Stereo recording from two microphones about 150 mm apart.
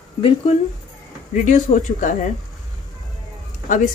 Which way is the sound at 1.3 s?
55° left (ahead or behind).